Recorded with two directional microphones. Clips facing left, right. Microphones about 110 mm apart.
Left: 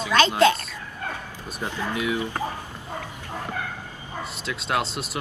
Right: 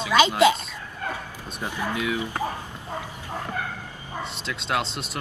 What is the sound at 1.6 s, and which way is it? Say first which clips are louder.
Speech: even; 15° right (ahead or behind).